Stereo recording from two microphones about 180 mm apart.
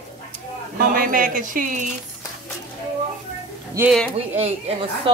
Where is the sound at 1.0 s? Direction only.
50° right (ahead or behind).